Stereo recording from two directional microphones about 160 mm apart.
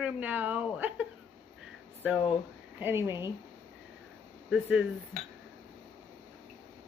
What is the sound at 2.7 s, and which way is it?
Speech, 15° right (ahead or behind).